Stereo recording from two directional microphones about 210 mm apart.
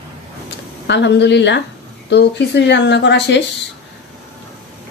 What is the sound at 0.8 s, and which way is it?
Speech, 55° left (ahead or behind).